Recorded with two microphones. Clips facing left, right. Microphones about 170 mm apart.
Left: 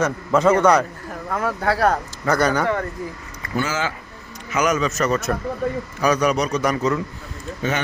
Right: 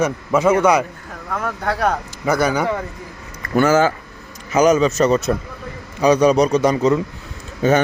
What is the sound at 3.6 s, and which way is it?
Speech, 50° right (ahead or behind).